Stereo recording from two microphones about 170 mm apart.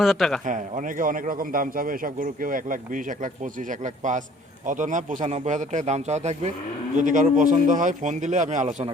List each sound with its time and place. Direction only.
0.0 s a man's voice: centre (ahead or behind)
0.4 s a man's voice: 50° right (ahead or behind)